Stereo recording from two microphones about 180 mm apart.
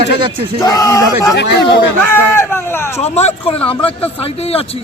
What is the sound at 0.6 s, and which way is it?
Speech, 20° left (ahead or behind).